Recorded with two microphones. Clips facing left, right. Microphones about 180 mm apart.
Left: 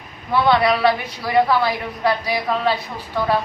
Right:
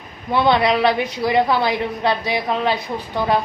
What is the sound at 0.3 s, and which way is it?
A woman's voice, 20° right (ahead or behind).